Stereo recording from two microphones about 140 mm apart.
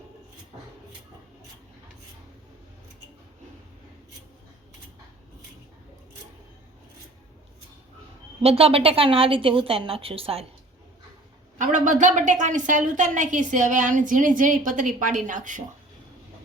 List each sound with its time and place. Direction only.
8.4 s a woman's voice: 45° right (ahead or behind)
11.5 s a woman's voice: 60° right (ahead or behind)